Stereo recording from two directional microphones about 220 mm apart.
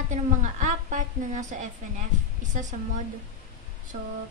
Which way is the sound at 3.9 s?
35° right (ahead or behind).